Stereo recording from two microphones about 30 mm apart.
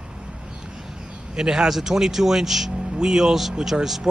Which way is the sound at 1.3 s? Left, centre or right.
Right.